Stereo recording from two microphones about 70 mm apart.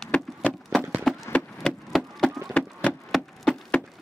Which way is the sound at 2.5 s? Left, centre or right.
Centre.